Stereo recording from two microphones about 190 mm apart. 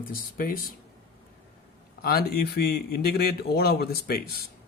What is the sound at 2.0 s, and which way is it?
A man's voice, 55° left (ahead or behind).